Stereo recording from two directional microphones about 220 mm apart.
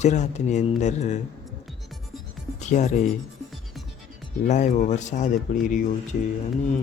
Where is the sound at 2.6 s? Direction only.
30° left (ahead or behind).